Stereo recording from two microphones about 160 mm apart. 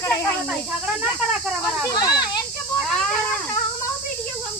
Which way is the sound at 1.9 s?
25° left (ahead or behind).